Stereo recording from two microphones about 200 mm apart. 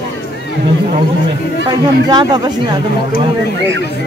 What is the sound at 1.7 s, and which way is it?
Speech, 20° right (ahead or behind).